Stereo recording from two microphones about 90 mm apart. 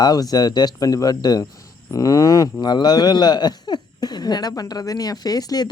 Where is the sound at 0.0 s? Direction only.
45° left (ahead or behind).